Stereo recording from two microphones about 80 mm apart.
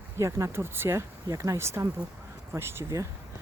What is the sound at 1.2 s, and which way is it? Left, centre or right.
Speech, right.